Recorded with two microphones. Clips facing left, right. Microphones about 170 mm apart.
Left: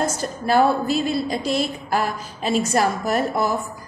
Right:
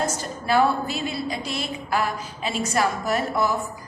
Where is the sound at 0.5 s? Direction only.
40° left (ahead or behind).